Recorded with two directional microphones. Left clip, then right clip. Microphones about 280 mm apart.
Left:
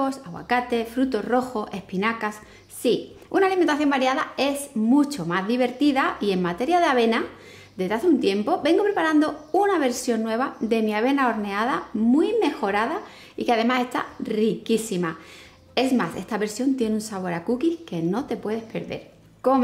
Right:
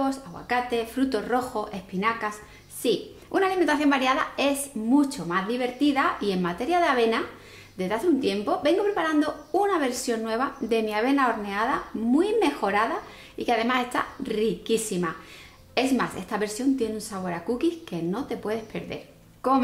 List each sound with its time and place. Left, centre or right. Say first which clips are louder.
0.0 s speech: left 2 dB; centre
0.7 s a woman's voice: left 2 dB; right
17.6 s a woman's voice: left 2 dB; right